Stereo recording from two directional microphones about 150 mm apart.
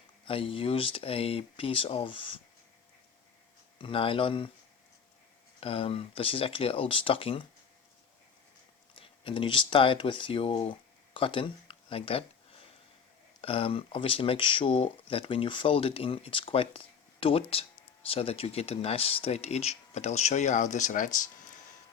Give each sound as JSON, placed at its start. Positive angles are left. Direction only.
{"t": 0.3, "sound": "speech", "side_deg": 35}
{"t": 3.8, "sound": "speech", "side_deg": 35}
{"t": 5.5, "sound": "speech", "side_deg": 40}
{"t": 9.0, "sound": "speech", "side_deg": 35}
{"t": 13.4, "sound": "speech", "side_deg": 40}